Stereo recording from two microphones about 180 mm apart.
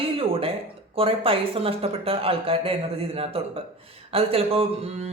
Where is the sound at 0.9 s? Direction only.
30° right (ahead or behind).